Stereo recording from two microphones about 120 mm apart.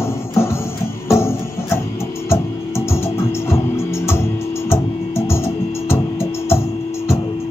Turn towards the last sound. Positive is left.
turn(degrees=20)  # may be behind; listen again after turning